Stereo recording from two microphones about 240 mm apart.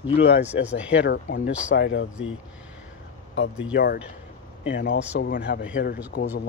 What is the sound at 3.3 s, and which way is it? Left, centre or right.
Speech, left.